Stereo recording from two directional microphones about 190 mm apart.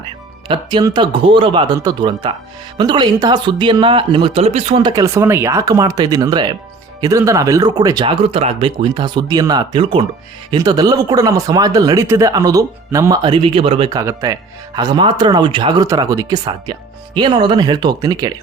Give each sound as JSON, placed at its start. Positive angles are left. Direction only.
{"t": 0.4, "sound": "speech", "side_deg": -25}
{"t": 14.0, "sound": "speech", "side_deg": -15}